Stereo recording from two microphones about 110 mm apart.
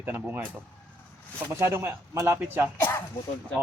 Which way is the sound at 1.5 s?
25° right (ahead or behind).